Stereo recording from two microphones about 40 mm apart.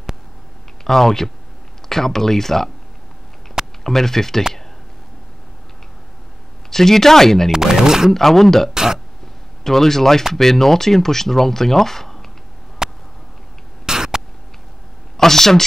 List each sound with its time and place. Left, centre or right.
0.8 s speech: centre
3.8 s speech: centre
6.7 s speech: centre
7.5 s speech: centre
8.1 s speech: centre
8.7 s a sound: centre
9.6 s speech: centre
12.8 s a sound: centre
15.1 s a woman's voice: centre